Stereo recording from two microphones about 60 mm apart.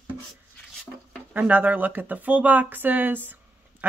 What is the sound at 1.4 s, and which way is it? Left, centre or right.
Speech, right.